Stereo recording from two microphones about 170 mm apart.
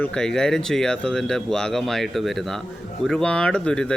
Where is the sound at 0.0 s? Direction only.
5° left (ahead or behind).